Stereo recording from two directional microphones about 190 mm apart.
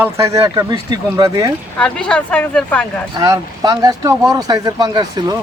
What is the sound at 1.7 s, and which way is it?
Speech, 5° left (ahead or behind).